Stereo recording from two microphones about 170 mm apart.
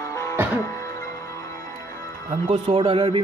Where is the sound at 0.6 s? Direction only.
15° left (ahead or behind).